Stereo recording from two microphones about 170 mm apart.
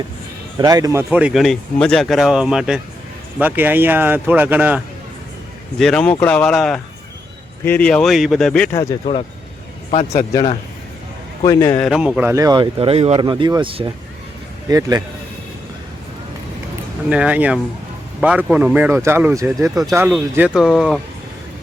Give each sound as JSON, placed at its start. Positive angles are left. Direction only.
{"t": 0.6, "sound": "speech", "side_deg": -20}
{"t": 1.1, "sound": "speech", "side_deg": -5}
{"t": 5.8, "sound": "speech", "side_deg": 5}
{"t": 8.7, "sound": "speech", "side_deg": 20}
{"t": 9.9, "sound": "speech", "side_deg": 40}
{"t": 11.4, "sound": "speech", "side_deg": 20}
{"t": 11.8, "sound": "speech", "side_deg": 0}
{"t": 12.3, "sound": "speech", "side_deg": -20}
{"t": 17.1, "sound": "speech", "side_deg": -5}